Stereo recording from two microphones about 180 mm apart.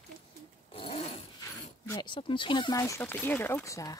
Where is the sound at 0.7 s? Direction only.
30° left (ahead or behind).